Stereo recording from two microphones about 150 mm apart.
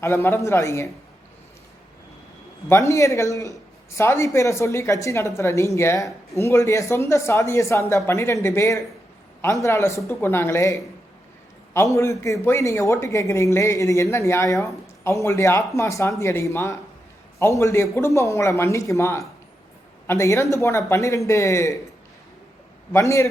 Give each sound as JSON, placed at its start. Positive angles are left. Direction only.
{"t": 0.0, "sound": "speech", "side_deg": 15}
{"t": 2.6, "sound": "speech", "side_deg": 20}
{"t": 22.9, "sound": "speech", "side_deg": 20}